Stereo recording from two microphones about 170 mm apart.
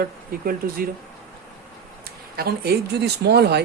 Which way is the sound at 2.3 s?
65° right (ahead or behind).